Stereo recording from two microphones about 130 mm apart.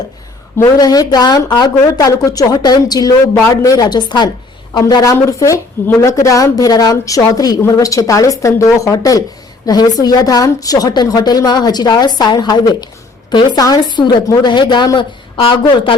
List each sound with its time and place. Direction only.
0.6 s a woman's voice: 30° left (ahead or behind)